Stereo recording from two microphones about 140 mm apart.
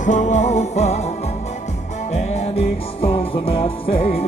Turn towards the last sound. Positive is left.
turn(degrees=45)  # may be behind; listen again after turning